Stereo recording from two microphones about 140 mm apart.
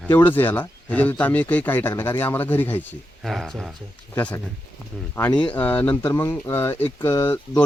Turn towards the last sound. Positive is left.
turn(degrees=20)  # may be behind; listen again after turning